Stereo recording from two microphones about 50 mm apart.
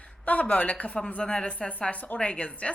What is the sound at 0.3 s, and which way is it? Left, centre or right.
A woman's voice, left.